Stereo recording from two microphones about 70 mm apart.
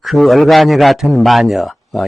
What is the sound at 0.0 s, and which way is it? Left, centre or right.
Speech, centre.